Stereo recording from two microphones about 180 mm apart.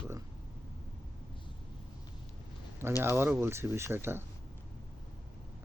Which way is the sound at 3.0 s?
10° right (ahead or behind).